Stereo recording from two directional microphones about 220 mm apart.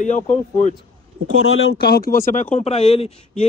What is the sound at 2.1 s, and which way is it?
A man's voice, 35° left (ahead or behind).